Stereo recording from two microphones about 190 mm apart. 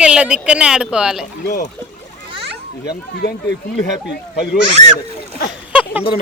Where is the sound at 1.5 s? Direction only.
55° left (ahead or behind).